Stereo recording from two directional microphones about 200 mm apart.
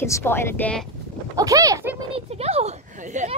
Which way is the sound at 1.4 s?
15° right (ahead or behind).